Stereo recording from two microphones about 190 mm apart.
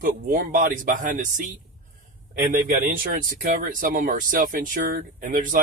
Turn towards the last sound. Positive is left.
turn(degrees=-45)  # may be behind; listen again after turning